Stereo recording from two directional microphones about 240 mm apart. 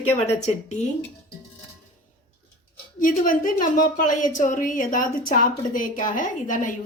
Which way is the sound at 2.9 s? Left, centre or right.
Left.